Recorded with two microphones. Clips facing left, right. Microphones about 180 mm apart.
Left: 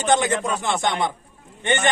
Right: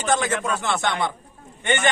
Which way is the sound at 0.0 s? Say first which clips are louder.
Left 3 dB; 20° left (ahead or behind).